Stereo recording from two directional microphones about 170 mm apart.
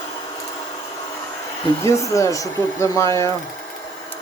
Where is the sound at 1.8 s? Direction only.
15° left (ahead or behind).